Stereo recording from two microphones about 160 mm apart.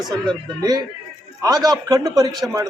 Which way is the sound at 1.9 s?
25° right (ahead or behind).